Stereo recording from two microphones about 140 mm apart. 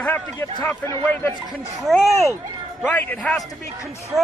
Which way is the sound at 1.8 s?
Centre (ahead or behind).